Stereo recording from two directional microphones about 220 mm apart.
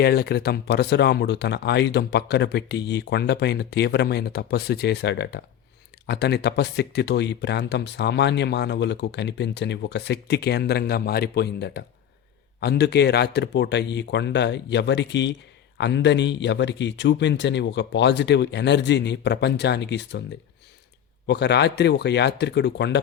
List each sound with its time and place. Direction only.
0.0 s speech: 45° left (ahead or behind)
21.2 s speech: 50° left (ahead or behind)